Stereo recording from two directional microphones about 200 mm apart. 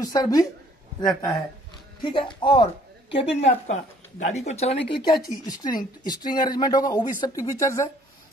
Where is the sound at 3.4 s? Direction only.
35° left (ahead or behind).